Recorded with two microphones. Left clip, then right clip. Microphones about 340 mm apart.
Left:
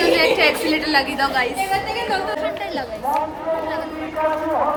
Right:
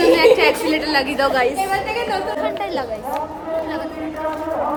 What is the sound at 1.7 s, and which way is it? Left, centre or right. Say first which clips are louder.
Chatter: right 1 dB; right.